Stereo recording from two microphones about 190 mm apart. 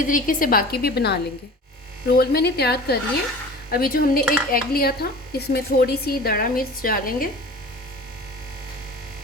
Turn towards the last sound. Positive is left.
turn(degrees=50)  # may be behind; listen again after turning